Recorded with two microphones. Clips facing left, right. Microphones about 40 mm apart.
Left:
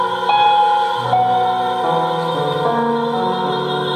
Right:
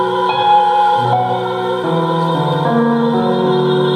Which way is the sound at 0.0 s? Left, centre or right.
Centre.